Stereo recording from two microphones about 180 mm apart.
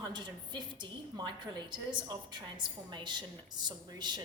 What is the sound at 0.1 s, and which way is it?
A woman's voice, 25° right (ahead or behind).